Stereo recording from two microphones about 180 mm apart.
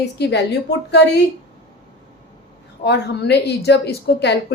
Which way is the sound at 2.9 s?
70° left (ahead or behind).